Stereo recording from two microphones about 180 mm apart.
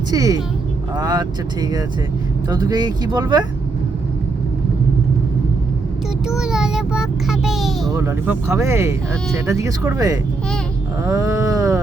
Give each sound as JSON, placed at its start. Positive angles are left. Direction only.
{"t": 0.1, "sound": "speech", "side_deg": -20}
{"t": 6.2, "sound": "a child's voice", "side_deg": -5}
{"t": 7.9, "sound": "speech", "side_deg": -15}
{"t": 11.0, "sound": "a sound", "side_deg": -20}